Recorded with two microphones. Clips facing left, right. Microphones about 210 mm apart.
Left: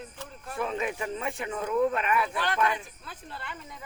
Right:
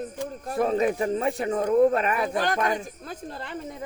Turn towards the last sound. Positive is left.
turn(degrees=-40)  # may be behind; listen again after turning